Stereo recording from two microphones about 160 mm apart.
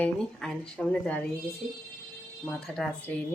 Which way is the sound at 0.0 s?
10° left (ahead or behind).